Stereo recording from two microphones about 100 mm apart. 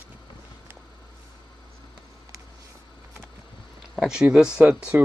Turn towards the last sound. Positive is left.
turn(degrees=-15)  # may be behind; listen again after turning